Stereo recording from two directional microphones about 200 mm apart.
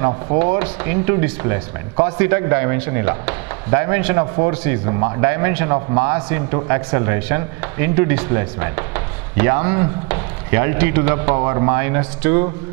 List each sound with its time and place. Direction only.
0.4 s a man's voice: 15° right (ahead or behind)